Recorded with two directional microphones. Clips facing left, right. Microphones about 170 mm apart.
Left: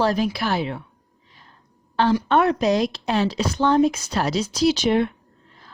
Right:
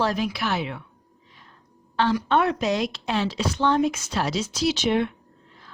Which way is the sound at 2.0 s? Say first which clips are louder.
Left 3 dB; 35° left (ahead or behind).